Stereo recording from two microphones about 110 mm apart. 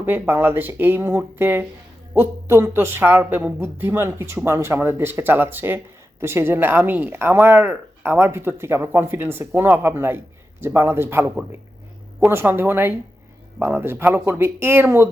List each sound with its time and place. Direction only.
0.0 s speech: 20° right (ahead or behind)